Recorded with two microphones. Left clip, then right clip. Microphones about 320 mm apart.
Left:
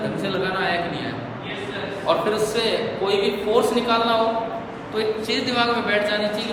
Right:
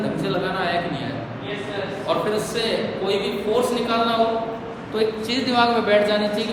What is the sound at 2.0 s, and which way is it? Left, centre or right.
A man's voice, centre.